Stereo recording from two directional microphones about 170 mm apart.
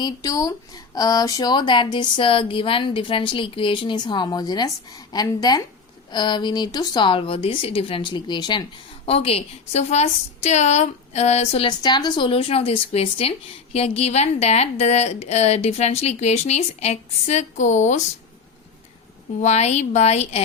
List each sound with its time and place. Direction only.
0.0 s a woman's voice: 20° left (ahead or behind); by 18.0 s 45° left (ahead or behind)
19.4 s a woman's voice: 40° left (ahead or behind)